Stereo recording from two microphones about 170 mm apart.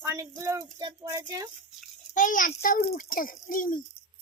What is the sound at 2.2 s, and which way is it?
A child's voice, 50° left (ahead or behind).